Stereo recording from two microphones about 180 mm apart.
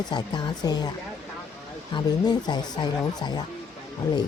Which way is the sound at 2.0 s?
25° left (ahead or behind).